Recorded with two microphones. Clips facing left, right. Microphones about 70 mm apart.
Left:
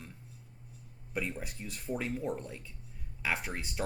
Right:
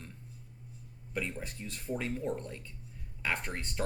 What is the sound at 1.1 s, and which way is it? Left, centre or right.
Speech, centre.